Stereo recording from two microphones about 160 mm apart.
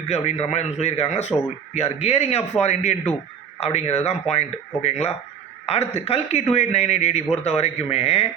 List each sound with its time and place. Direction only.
0.1 s a man's voice: 45° left (ahead or behind)